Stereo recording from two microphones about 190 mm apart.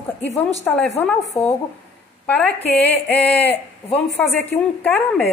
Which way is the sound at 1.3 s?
30° left (ahead or behind).